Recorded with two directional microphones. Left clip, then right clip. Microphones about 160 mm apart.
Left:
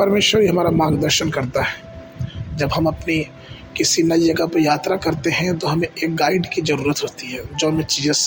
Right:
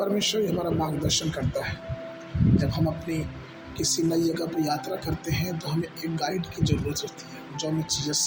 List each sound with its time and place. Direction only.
0.0 s speech: 45° left (ahead or behind)